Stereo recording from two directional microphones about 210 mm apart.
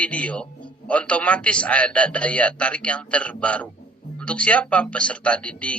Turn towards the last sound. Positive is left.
turn(degrees=5)  # may be behind; listen again after turning